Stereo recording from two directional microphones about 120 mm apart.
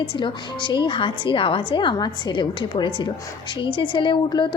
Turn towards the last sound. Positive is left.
turn(degrees=45)  # may be behind; listen again after turning